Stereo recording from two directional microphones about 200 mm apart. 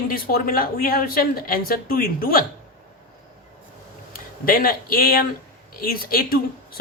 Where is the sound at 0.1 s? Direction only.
50° left (ahead or behind).